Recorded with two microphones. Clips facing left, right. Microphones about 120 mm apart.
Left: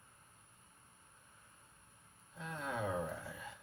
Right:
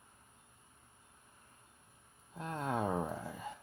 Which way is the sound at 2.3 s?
45° right (ahead or behind).